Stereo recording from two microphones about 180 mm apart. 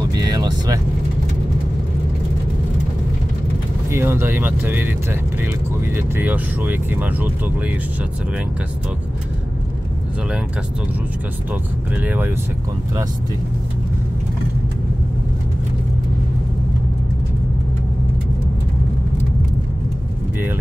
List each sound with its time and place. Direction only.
0.1 s vehicle: 25° right (ahead or behind)
3.9 s speech: 15° right (ahead or behind)
5.9 s speech: 10° right (ahead or behind)
12.0 s speech: 10° right (ahead or behind)